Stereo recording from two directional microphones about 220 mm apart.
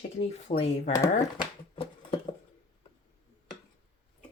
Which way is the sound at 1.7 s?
25° left (ahead or behind).